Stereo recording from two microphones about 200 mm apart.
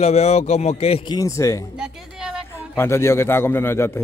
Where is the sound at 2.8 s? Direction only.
15° left (ahead or behind).